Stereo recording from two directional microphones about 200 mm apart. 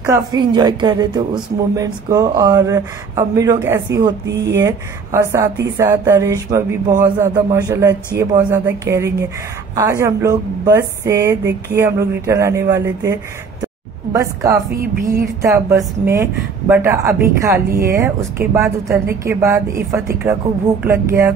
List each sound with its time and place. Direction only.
0.0 s a woman's voice: 20° right (ahead or behind)